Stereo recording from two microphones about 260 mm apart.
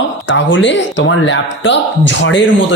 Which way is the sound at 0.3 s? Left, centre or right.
Left.